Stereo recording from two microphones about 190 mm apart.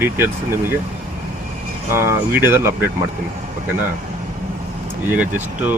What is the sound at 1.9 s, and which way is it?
Speech, 10° right (ahead or behind).